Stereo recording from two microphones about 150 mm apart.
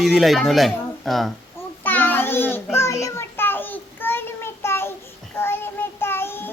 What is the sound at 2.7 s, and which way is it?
Child singing, 20° left (ahead or behind).